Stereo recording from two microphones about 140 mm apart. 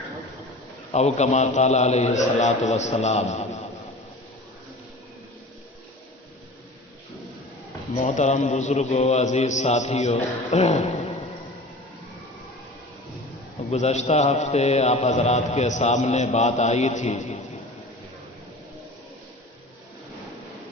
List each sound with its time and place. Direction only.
0.9 s a man's voice: 50° left (ahead or behind)
7.9 s a man's voice: 60° left (ahead or behind)
13.7 s a man's voice: 55° left (ahead or behind)